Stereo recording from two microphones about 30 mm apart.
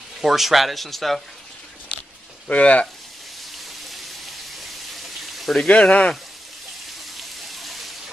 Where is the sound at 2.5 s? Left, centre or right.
Left.